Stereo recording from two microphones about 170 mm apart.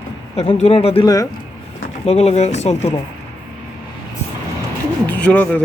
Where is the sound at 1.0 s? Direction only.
20° left (ahead or behind).